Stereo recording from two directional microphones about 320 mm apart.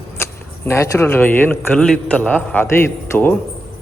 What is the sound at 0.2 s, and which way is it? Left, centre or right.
A man's voice, centre.